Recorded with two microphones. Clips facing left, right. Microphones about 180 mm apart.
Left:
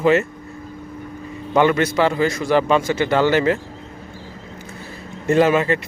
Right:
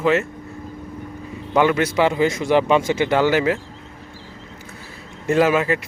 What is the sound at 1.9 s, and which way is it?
Speech, 15° right (ahead or behind).